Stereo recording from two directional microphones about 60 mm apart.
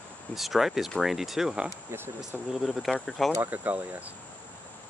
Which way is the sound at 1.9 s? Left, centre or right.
Right.